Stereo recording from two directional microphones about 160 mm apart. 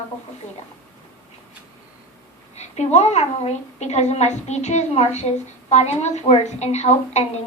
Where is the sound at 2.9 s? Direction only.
45° left (ahead or behind).